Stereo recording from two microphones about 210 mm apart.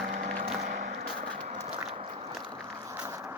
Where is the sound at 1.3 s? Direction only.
30° right (ahead or behind).